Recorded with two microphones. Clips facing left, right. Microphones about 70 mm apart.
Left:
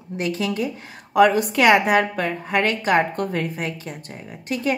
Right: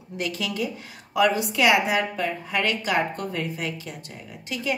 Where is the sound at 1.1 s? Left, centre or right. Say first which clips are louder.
Left 6 dB; left.